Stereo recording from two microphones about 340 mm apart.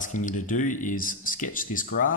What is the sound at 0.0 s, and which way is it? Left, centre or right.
Speech, left.